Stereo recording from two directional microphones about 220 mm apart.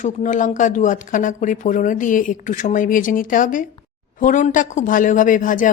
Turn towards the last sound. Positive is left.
turn(degrees=35)  # may be behind; listen again after turning